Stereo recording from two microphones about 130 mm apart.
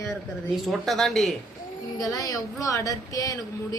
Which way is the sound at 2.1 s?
25° left (ahead or behind).